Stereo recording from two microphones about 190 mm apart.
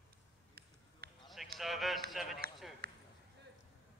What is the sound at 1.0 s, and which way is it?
Basketball bounce, 55° right (ahead or behind).